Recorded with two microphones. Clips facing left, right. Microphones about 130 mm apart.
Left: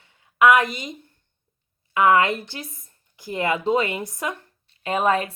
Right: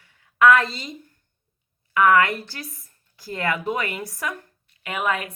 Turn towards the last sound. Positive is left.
turn(degrees=30)  # may be behind; listen again after turning